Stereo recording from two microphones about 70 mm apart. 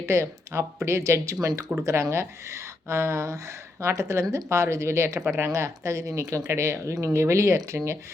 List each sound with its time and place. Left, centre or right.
0.0 s speech: right